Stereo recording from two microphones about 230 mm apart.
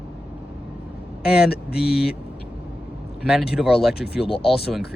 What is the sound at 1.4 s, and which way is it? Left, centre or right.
Speech, left.